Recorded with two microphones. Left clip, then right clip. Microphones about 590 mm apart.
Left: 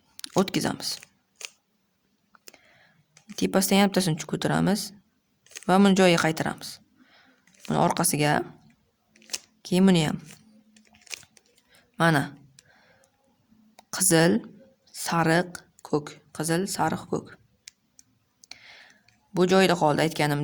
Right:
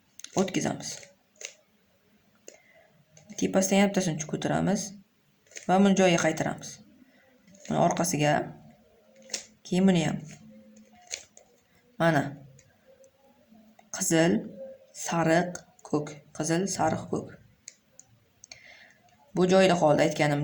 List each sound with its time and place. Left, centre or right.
0.3 s speech: left
3.3 s speech: left
9.6 s speech: left
11.9 s speech: left
13.9 s speech: left
19.3 s speech: left